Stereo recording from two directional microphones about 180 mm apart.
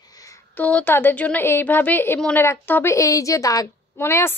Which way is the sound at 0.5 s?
10° left (ahead or behind).